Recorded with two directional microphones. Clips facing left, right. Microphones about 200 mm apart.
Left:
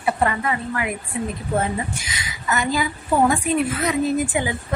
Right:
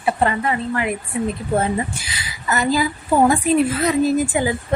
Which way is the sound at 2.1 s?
35° right (ahead or behind).